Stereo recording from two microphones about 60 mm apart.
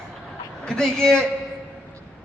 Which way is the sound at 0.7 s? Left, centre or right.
Centre.